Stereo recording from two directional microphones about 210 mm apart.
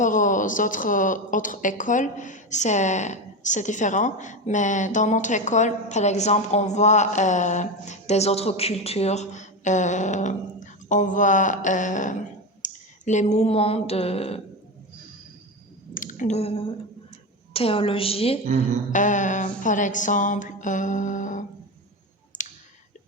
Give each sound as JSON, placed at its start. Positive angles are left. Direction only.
{"t": 0.0, "sound": "a woman's voice", "side_deg": 35}
{"t": 12.6, "sound": "a sound", "side_deg": 35}
{"t": 16.0, "sound": "a woman's voice", "side_deg": 40}
{"t": 22.3, "sound": "clicking", "side_deg": 40}